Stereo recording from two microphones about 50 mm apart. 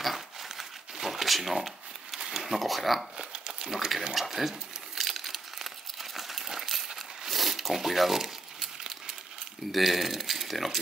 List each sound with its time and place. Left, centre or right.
0.0 s crumpling: centre
2.3 s speech: centre
3.2 s a sound: centre
6.1 s coin: centre
9.7 s speech: centre